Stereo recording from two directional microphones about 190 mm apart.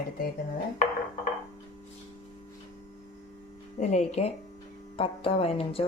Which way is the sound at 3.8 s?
35° left (ahead or behind).